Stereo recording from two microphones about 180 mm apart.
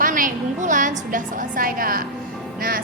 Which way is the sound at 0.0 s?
50° right (ahead or behind).